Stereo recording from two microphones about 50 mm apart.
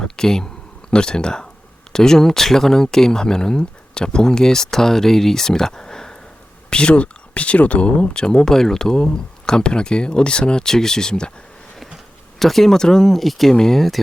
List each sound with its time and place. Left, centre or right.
0.0 s a sound: centre
0.9 s speech: centre
12.4 s speech: centre